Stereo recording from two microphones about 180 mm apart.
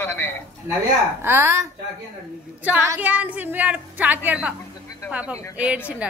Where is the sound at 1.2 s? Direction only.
15° right (ahead or behind).